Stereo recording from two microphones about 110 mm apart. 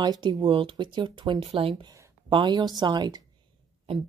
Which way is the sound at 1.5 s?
55° right (ahead or behind).